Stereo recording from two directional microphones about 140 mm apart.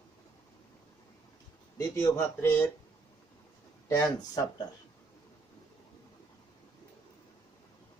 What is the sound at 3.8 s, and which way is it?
Speech, 25° left (ahead or behind).